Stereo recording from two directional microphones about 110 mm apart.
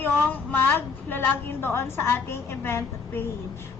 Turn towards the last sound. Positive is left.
turn(degrees=20)  # may be behind; listen again after turning